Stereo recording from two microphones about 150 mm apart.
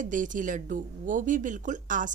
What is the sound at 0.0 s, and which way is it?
A woman's voice, 60° right (ahead or behind).